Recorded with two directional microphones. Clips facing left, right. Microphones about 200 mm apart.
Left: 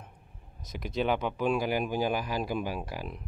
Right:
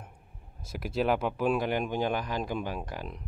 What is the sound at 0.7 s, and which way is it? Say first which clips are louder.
Speech: right 1 dB; 5° right (ahead or behind).